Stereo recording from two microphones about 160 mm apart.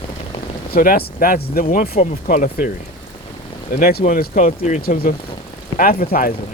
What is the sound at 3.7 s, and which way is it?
Speech, 65° left (ahead or behind).